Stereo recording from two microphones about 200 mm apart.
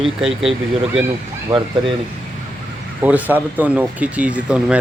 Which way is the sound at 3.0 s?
10° right (ahead or behind).